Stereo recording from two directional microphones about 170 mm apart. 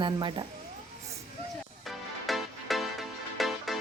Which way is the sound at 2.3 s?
Centre (ahead or behind).